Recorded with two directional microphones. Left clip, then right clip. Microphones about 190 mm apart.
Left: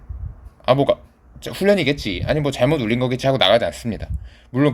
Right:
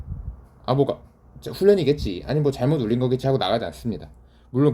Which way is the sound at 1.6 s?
30° left (ahead or behind).